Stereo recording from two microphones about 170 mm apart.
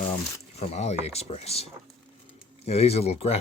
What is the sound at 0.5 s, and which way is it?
Speech, 40° left (ahead or behind).